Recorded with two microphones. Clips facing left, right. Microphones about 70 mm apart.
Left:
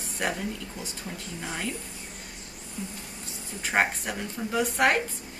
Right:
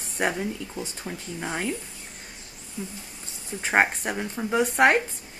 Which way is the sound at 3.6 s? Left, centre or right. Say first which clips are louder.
Right 4 dB; right.